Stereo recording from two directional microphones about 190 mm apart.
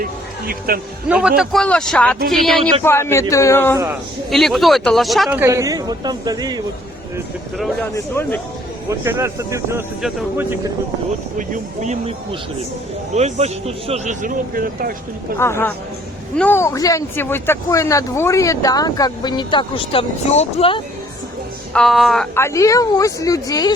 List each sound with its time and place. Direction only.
0.7 s speech: 50° right (ahead or behind)
1.0 s speech: 5° right (ahead or behind)
2.8 s speech: 15° left (ahead or behind)
4.3 s speech: centre (ahead or behind)
5.4 s speech: 15° right (ahead or behind)
7.9 s speech: 10° left (ahead or behind)
8.9 s speech: 15° right (ahead or behind)
10.0 s speech: centre (ahead or behind)
11.3 s speech: 40° right (ahead or behind)
15.4 s speech: 15° left (ahead or behind); by 20.8 s 30° left (ahead or behind)
21.7 s speech: 5° left (ahead or behind)
22.4 s speech: 15° left (ahead or behind)